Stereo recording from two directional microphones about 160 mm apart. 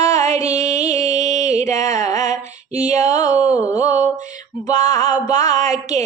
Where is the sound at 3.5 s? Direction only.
20° left (ahead or behind).